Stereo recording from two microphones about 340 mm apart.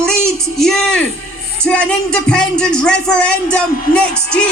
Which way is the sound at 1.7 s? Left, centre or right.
Centre.